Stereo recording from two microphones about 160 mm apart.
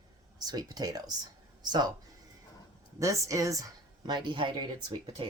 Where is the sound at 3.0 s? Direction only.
20° right (ahead or behind).